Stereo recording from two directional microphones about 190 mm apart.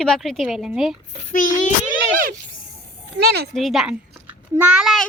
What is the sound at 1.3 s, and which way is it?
Child singing, 40° left (ahead or behind).